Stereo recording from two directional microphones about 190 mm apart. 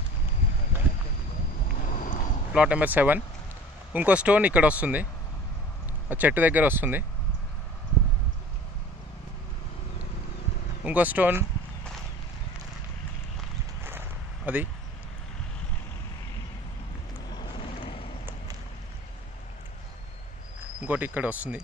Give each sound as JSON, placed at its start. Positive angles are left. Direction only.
{"t": 2.0, "sound": "a sound", "side_deg": 45}
{"t": 2.5, "sound": "speech", "side_deg": -5}
{"t": 6.0, "sound": "speech", "side_deg": -10}
{"t": 10.9, "sound": "speech", "side_deg": -10}
{"t": 13.8, "sound": "a sound", "side_deg": -10}
{"t": 17.3, "sound": "vehicle", "side_deg": 25}
{"t": 20.8, "sound": "speech", "side_deg": -10}